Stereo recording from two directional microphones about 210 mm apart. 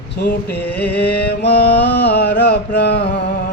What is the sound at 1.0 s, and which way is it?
Mantra, 50° left (ahead or behind).